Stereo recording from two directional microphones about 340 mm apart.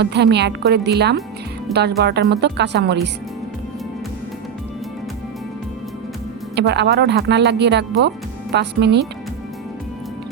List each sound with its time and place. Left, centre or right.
0.0 s speech: right
6.6 s speech: right